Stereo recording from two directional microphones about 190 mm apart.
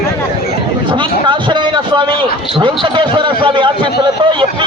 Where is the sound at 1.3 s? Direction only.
25° right (ahead or behind).